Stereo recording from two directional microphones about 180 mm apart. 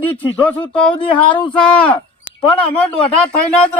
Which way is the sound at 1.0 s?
30° left (ahead or behind).